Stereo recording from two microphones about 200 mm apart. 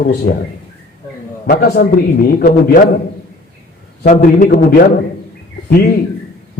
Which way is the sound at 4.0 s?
45° left (ahead or behind).